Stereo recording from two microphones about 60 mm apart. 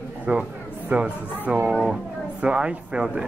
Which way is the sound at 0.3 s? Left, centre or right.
Right.